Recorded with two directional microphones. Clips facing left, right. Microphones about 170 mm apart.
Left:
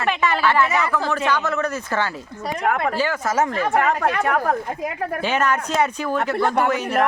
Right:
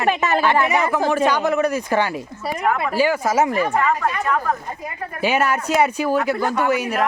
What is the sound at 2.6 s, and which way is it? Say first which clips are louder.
Speech: even; 45° left (ahead or behind).